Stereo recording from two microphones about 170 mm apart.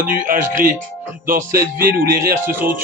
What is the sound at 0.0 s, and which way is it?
Speech, 55° right (ahead or behind).